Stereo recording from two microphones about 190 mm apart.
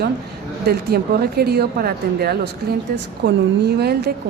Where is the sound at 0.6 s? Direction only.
55° right (ahead or behind).